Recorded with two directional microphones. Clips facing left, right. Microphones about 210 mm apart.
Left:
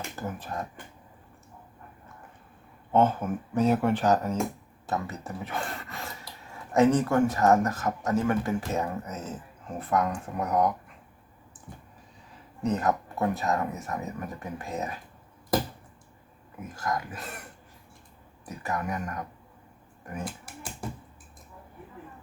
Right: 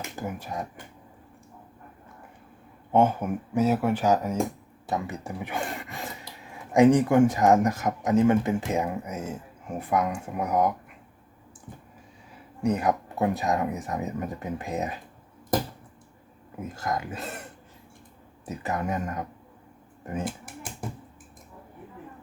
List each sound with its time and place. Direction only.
0.2 s speech: 10° right (ahead or behind)
2.9 s speech: 10° right (ahead or behind)
12.6 s speech: 10° right (ahead or behind)
16.6 s speech: 20° right (ahead or behind)
18.4 s speech: 20° right (ahead or behind)